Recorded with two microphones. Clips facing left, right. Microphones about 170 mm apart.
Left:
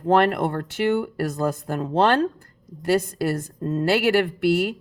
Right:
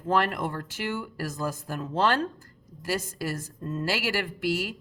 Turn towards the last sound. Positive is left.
turn(degrees=60)  # may be behind; listen again after turning